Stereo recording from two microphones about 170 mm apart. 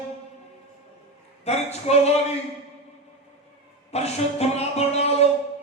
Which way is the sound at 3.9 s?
40° left (ahead or behind).